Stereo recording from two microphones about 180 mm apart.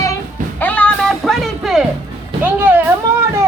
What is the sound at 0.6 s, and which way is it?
Music, 10° left (ahead or behind).